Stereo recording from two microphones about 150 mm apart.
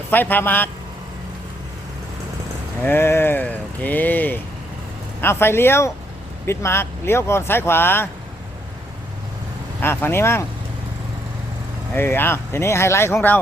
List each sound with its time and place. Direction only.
0.1 s speech: 10° left (ahead or behind)
2.8 s speech: 15° left (ahead or behind)
9.8 s speech: 15° left (ahead or behind)
11.9 s speech: 15° left (ahead or behind)